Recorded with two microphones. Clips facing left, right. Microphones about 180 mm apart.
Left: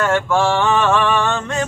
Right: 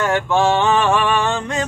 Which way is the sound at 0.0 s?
20° right (ahead or behind).